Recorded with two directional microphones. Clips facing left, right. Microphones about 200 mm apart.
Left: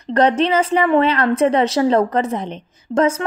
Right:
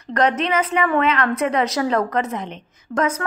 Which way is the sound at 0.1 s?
30° left (ahead or behind).